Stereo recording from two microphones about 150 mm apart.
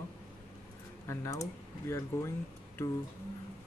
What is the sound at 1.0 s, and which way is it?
Speech, 20° left (ahead or behind).